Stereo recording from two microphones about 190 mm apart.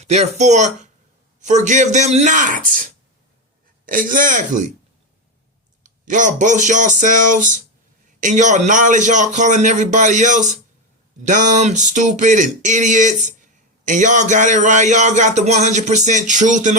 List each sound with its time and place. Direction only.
0.0 s speech: 35° right (ahead or behind)
5.8 s speech: 40° right (ahead or behind)